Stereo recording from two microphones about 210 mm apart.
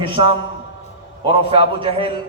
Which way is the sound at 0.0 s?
25° right (ahead or behind).